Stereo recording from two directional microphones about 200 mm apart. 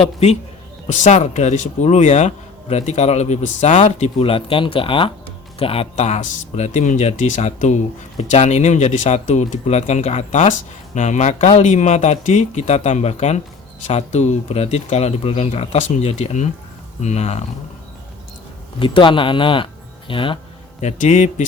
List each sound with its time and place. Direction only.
0.0 s a man's voice: 30° left (ahead or behind)
18.8 s speech: 25° left (ahead or behind)
20.8 s a man's voice: 35° left (ahead or behind)